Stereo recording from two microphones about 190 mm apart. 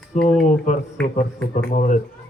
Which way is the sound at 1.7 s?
45° left (ahead or behind).